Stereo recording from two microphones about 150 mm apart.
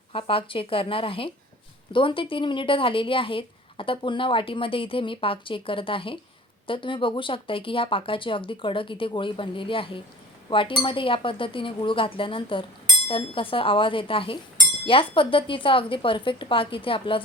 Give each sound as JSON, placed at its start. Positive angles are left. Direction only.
{"t": 0.1, "sound": "speech", "side_deg": 35}